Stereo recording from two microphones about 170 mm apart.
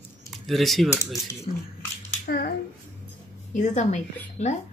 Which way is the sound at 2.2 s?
70° left (ahead or behind).